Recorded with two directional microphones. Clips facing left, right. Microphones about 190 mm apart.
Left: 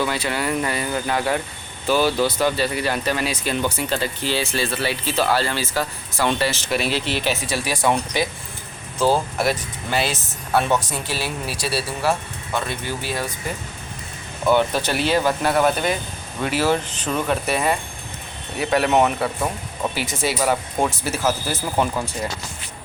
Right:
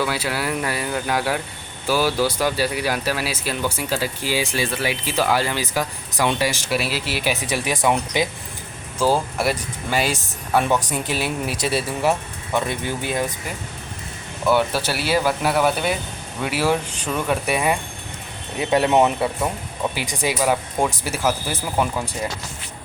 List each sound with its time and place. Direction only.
0.0 s speech: 5° right (ahead or behind)
7.4 s speech: 20° right (ahead or behind)
14.4 s speech: 5° right (ahead or behind)
18.5 s speech: 20° right (ahead or behind)